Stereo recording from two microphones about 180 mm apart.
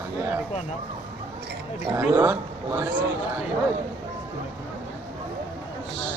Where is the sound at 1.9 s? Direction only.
10° right (ahead or behind).